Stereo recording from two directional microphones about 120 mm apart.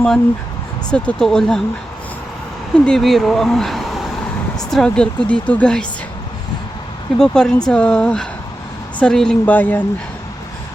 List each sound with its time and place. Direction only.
0.9 s speech: 10° left (ahead or behind)
2.7 s speech: 5° left (ahead or behind)
7.2 s speech: 5° left (ahead or behind)